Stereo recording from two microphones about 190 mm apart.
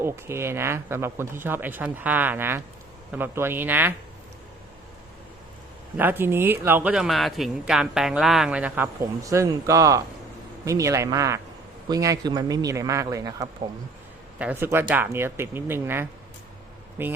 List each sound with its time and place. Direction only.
0.0 s speech: 15° right (ahead or behind)
6.0 s speech: 10° right (ahead or behind)